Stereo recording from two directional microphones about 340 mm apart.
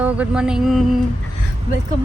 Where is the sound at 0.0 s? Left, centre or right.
Centre.